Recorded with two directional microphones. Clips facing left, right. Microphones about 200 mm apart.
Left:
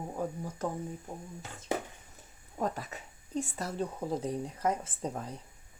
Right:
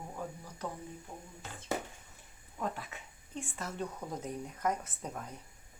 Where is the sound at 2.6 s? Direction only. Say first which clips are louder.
Left 4 dB; 40° left (ahead or behind).